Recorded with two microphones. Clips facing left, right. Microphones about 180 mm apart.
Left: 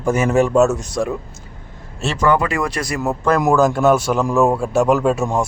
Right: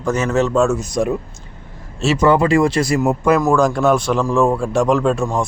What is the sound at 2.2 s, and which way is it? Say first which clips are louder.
Speech: right 4 dB; 25° right (ahead or behind).